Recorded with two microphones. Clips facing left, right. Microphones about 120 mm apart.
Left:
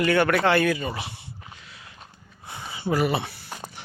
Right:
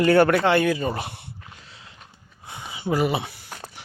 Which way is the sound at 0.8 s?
45° right (ahead or behind).